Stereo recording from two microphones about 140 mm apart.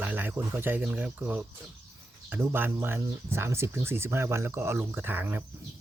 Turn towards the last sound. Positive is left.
turn(degrees=-15)  # may be behind; listen again after turning